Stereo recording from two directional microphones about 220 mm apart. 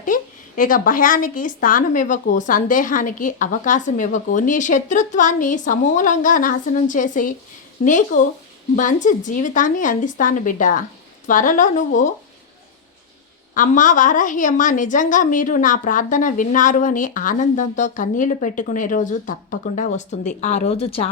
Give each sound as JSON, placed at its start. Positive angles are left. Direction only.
{"t": 0.0, "sound": "a woman's voice", "side_deg": 40}
{"t": 13.5, "sound": "a woman's voice", "side_deg": 35}